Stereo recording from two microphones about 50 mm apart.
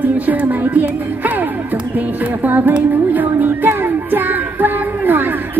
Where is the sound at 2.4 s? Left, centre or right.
Right.